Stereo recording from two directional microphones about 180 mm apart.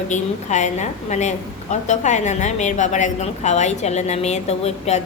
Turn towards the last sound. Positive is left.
turn(degrees=35)  # may be behind; listen again after turning